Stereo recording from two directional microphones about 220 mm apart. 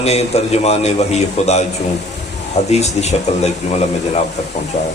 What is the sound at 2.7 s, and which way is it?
Speech, 30° left (ahead or behind).